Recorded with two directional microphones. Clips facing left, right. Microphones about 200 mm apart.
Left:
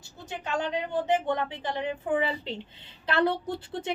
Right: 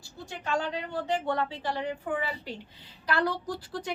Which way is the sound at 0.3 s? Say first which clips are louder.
Left 1 dB; 20° left (ahead or behind).